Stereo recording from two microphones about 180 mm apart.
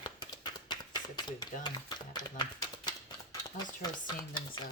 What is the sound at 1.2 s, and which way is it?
Speech, 25° left (ahead or behind).